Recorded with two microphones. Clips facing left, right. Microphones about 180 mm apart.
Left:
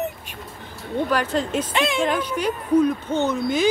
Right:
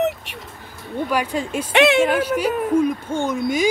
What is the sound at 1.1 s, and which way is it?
Speech, 10° right (ahead or behind).